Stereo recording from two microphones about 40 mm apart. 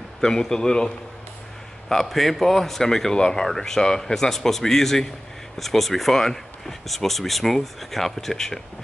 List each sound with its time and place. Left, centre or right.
0.2 s speech: centre
1.9 s speech: centre